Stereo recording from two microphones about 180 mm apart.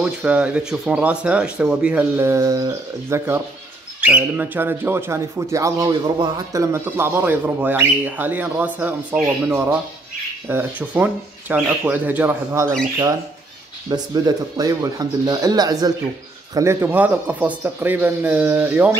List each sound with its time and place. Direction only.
0.0 s speech: 5° right (ahead or behind)
13.8 s speech: 20° right (ahead or behind)